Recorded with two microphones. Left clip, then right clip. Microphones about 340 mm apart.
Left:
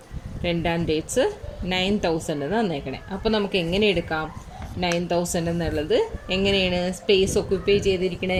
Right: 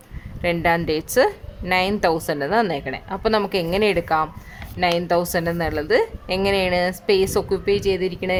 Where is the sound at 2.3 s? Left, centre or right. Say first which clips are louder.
Right 5 dB; right.